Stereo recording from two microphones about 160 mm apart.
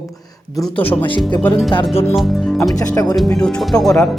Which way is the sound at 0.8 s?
10° left (ahead or behind).